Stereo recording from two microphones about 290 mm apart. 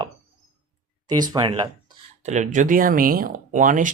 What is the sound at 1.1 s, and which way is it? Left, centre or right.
Speech, centre.